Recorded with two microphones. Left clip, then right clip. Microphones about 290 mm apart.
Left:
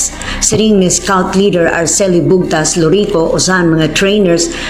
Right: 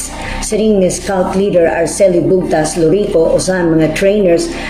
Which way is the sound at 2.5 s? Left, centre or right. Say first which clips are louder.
Left 1 dB; left.